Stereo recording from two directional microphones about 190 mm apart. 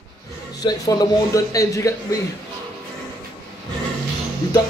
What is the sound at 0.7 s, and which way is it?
A man's voice, 20° left (ahead or behind).